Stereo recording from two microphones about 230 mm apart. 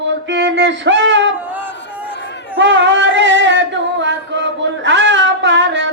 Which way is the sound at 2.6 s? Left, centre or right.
Right.